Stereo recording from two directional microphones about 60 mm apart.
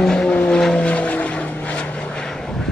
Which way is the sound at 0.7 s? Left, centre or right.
Left.